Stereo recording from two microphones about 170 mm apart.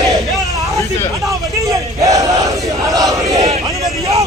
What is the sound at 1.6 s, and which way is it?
Battle cry, 20° right (ahead or behind).